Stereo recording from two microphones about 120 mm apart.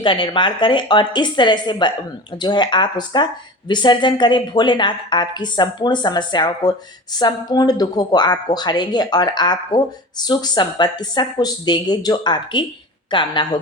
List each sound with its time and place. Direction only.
0.0 s a woman's voice: 40° left (ahead or behind)